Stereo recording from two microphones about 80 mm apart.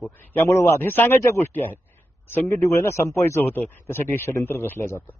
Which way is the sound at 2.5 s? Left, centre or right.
Left.